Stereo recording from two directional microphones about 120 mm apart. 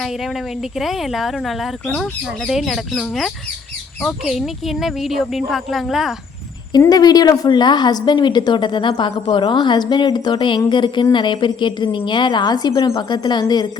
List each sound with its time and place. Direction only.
0.0 s speech: centre (ahead or behind)
6.7 s a woman's voice: 35° left (ahead or behind)